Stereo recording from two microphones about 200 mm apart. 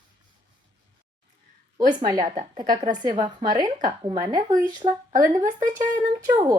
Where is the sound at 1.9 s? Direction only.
20° right (ahead or behind).